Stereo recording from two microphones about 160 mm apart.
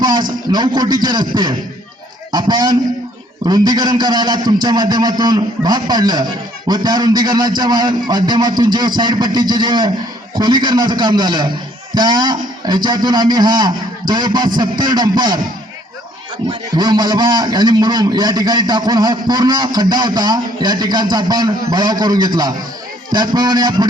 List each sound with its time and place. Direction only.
0.0 s a man's voice: 25° right (ahead or behind)
16.5 s a man's voice: 25° right (ahead or behind)